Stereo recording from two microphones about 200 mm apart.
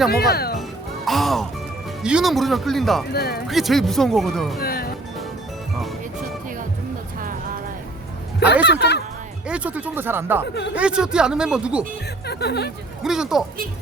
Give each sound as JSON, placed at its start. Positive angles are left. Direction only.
{"t": 0.1, "sound": "speech", "side_deg": 50}
{"t": 1.0, "sound": "music", "side_deg": 0}
{"t": 2.0, "sound": "speech", "side_deg": -5}
{"t": 3.1, "sound": "speech", "side_deg": 50}
{"t": 3.4, "sound": "speech", "side_deg": 0}
{"t": 4.6, "sound": "music", "side_deg": 50}
{"t": 8.6, "sound": "speech", "side_deg": 55}
{"t": 9.5, "sound": "speech", "side_deg": -5}
{"t": 10.4, "sound": "speech", "side_deg": 60}
{"t": 10.8, "sound": "speech", "side_deg": -5}
{"t": 12.2, "sound": "speech", "side_deg": 55}
{"t": 13.0, "sound": "speech", "side_deg": 0}